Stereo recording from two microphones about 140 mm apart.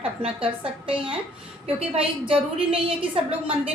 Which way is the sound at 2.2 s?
40° right (ahead or behind).